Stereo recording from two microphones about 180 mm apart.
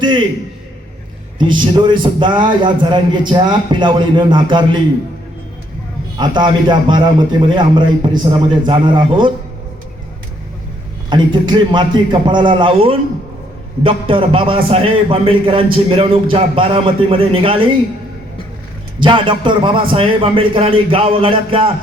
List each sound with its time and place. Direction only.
1.4 s a man's voice: 25° right (ahead or behind)
6.1 s a man's voice: 25° right (ahead or behind)
11.1 s a man's voice: 25° right (ahead or behind)
18.9 s a man's voice: 25° right (ahead or behind)